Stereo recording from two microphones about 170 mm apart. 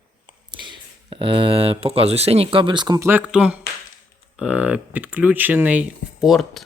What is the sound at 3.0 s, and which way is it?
Speech, 10° right (ahead or behind).